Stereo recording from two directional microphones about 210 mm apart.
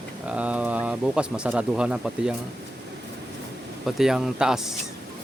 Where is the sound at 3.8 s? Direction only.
Centre (ahead or behind).